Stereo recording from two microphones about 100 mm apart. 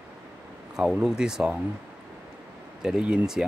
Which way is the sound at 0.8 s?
5° right (ahead or behind).